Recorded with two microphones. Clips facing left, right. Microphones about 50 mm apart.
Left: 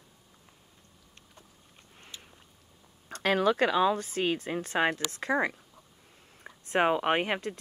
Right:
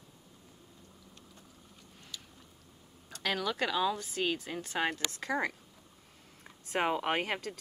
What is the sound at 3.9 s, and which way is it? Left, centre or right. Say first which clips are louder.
A woman's voice: left 4 dB; left.